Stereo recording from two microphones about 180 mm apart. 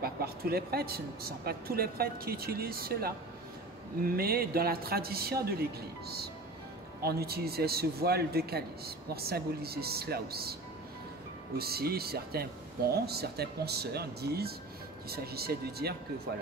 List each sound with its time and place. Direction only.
0.0 s a man's voice: 60° right (ahead or behind)
11.5 s a man's voice: 60° right (ahead or behind)